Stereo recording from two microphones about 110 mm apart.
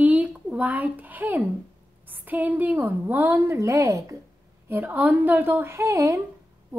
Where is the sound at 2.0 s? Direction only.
15° right (ahead or behind).